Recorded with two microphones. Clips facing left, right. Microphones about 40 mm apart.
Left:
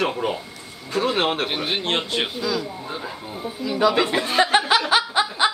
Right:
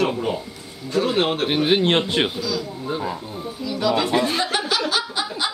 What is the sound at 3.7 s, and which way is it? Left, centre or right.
Speech, centre.